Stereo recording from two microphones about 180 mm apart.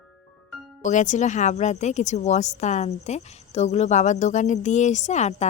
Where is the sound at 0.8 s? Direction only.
45° left (ahead or behind).